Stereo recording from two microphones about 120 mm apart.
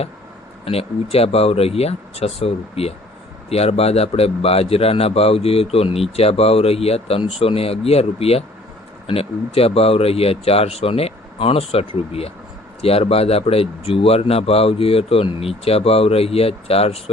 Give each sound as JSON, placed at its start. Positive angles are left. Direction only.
{"t": 0.6, "sound": "a man's voice", "side_deg": 55}